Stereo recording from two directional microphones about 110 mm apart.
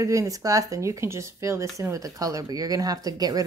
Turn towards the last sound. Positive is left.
turn(degrees=-35)  # may be behind; listen again after turning